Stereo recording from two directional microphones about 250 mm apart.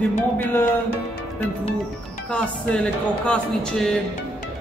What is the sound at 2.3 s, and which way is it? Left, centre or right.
Speech, centre.